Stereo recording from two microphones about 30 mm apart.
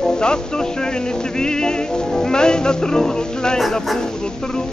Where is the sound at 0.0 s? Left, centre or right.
Left.